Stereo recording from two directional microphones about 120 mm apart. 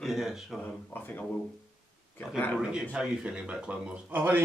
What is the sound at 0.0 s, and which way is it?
Speech, 5° right (ahead or behind).